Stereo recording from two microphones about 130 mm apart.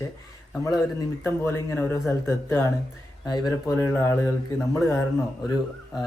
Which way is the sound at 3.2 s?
30° left (ahead or behind).